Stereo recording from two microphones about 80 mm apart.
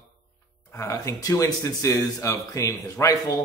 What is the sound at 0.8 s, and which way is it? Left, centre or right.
Speech, left.